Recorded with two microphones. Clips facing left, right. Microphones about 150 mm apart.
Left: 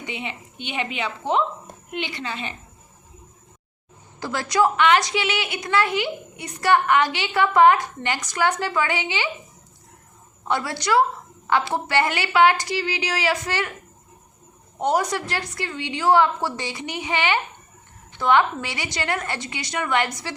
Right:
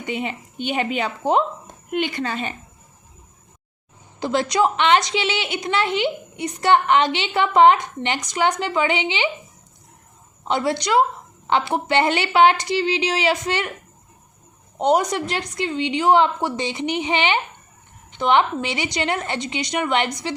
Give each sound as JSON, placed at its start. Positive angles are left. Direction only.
{"t": 0.0, "sound": "a woman's voice", "side_deg": -45}
{"t": 4.2, "sound": "a woman's voice", "side_deg": -20}
{"t": 10.4, "sound": "a woman's voice", "side_deg": -20}
{"t": 14.8, "sound": "a woman's voice", "side_deg": -20}